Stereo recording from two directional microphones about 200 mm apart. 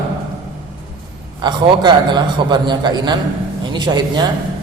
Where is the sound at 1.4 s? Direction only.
20° right (ahead or behind).